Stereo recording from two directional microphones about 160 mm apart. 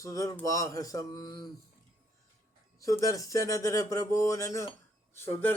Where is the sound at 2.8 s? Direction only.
20° left (ahead or behind).